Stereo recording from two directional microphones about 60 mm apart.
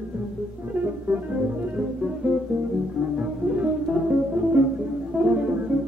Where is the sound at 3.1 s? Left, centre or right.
Centre.